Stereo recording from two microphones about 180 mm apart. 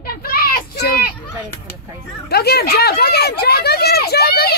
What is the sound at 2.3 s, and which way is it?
Speech, 60° left (ahead or behind).